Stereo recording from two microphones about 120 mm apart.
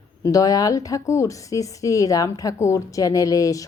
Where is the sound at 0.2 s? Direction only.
30° left (ahead or behind).